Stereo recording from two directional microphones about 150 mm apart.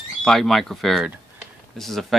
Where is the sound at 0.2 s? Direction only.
Centre (ahead or behind).